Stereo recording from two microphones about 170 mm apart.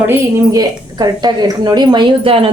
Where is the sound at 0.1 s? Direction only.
25° right (ahead or behind).